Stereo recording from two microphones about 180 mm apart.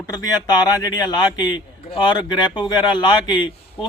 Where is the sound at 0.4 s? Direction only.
20° left (ahead or behind).